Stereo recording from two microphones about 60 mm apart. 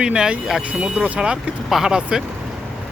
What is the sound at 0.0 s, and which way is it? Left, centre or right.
Speech, centre.